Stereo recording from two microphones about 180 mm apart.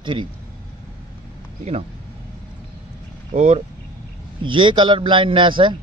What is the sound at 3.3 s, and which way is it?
Speech, 40° right (ahead or behind).